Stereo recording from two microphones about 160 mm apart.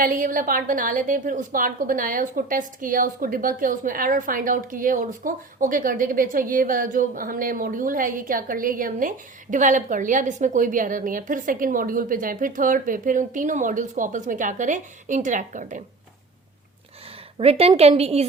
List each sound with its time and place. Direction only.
0.0 s a woman's voice: 55° right (ahead or behind)
17.3 s a woman's voice: 40° right (ahead or behind)